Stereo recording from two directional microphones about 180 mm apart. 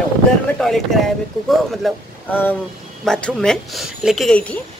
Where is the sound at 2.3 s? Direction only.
10° left (ahead or behind).